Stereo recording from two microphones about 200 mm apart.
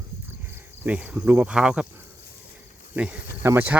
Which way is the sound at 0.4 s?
10° right (ahead or behind).